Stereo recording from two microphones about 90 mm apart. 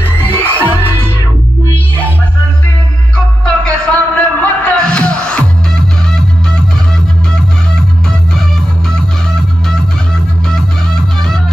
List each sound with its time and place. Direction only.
0.0 s music: 20° left (ahead or behind)
3.4 s music: 15° left (ahead or behind)